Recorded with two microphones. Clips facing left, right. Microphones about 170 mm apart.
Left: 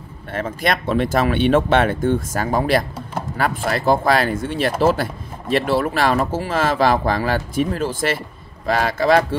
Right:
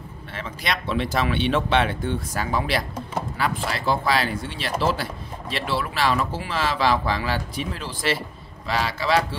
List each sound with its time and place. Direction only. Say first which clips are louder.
0.3 s speech: left 8 dB; 50° left (ahead or behind)